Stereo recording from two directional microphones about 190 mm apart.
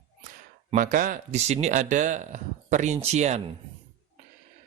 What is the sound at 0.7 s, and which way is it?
Speech, 45° right (ahead or behind).